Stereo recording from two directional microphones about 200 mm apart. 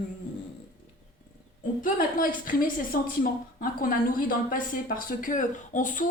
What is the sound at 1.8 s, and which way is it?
A woman's voice, 45° left (ahead or behind).